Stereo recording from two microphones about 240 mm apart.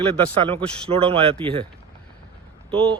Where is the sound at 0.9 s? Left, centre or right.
Right.